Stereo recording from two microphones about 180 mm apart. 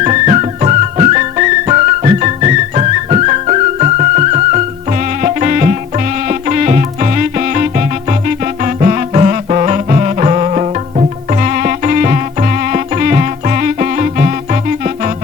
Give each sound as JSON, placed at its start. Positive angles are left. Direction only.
{"t": 0.0, "sound": "music", "side_deg": -40}